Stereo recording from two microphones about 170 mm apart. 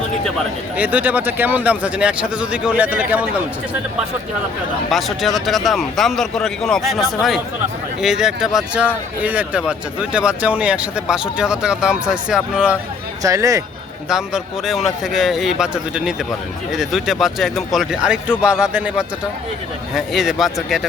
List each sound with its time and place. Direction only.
0.8 s a man's voice: 10° right (ahead or behind)
4.9 s speech: centre (ahead or behind)
13.2 s speech: 20° right (ahead or behind)
14.1 s speech: 5° right (ahead or behind)